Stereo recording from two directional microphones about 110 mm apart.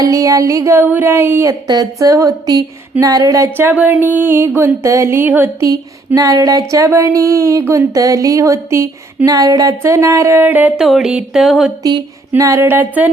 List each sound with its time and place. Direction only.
0.0 s speech: 30° right (ahead or behind)
1.6 s speech: 35° right (ahead or behind)
3.7 s speech: 15° right (ahead or behind)
6.1 s speech: 30° right (ahead or behind); by 10.8 s 15° right (ahead or behind)
10.8 s a sound: 5° right (ahead or behind)
11.8 s speech: 35° right (ahead or behind)
12.4 s music: 25° right (ahead or behind)